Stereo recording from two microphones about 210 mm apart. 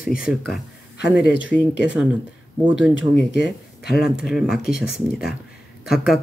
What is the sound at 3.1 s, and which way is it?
Speech, 55° left (ahead or behind).